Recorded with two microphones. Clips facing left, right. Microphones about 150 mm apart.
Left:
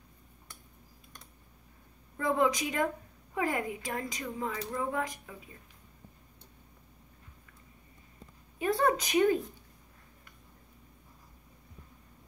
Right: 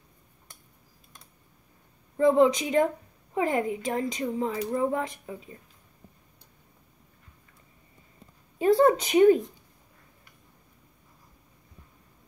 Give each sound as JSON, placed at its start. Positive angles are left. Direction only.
{"t": 2.1, "sound": "speech", "side_deg": -25}
{"t": 8.5, "sound": "speech", "side_deg": -25}